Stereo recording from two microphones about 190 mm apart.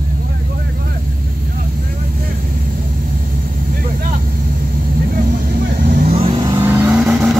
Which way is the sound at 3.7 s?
45° right (ahead or behind).